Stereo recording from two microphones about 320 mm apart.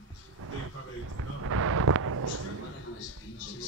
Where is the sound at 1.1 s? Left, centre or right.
Right.